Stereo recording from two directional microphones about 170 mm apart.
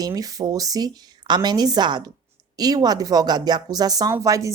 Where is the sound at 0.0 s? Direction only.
20° right (ahead or behind).